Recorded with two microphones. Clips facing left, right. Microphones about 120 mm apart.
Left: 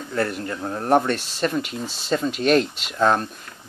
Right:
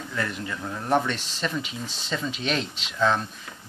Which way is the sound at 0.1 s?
45° left (ahead or behind).